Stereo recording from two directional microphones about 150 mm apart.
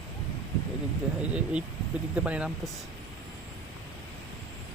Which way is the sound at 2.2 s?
5° right (ahead or behind).